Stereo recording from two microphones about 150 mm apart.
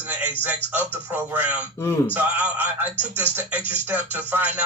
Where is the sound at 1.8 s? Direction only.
15° left (ahead or behind).